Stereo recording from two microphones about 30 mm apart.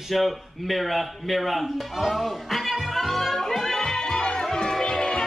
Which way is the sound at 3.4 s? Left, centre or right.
Centre.